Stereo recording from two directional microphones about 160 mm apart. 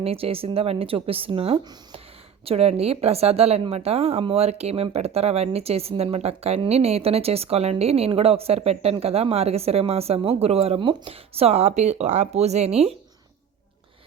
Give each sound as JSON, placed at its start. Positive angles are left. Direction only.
{"t": 0.0, "sound": "a woman's voice", "side_deg": -35}